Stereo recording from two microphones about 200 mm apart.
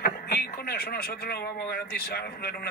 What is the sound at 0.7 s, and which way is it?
Speech, 50° left (ahead or behind).